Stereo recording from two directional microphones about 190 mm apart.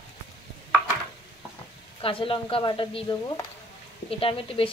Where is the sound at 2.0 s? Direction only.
30° left (ahead or behind).